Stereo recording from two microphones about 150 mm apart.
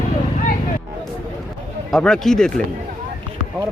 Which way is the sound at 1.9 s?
5° left (ahead or behind).